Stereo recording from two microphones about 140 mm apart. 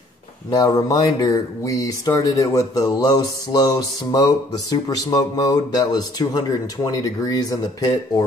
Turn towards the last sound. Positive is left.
turn(degrees=25)  # may be behind; listen again after turning